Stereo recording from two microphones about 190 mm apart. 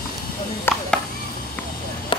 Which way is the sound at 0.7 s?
10° left (ahead or behind).